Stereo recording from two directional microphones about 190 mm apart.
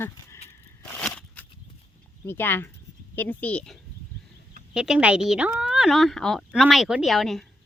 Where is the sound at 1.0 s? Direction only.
5° left (ahead or behind).